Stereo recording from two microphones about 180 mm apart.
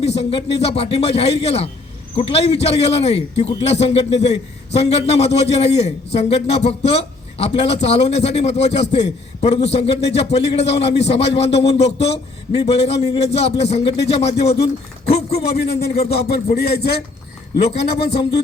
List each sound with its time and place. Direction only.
0.0 s a man's voice: 35° left (ahead or behind)
15.4 s a man's voice: 60° left (ahead or behind)
17.6 s a man's voice: 35° left (ahead or behind)